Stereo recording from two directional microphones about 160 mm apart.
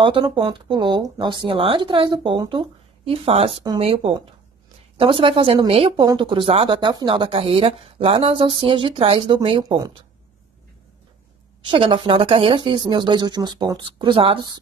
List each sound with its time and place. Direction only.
0.0 s speech: 30° right (ahead or behind)
9.8 s a woman's voice: 25° right (ahead or behind)
11.6 s a woman's voice: 30° right (ahead or behind)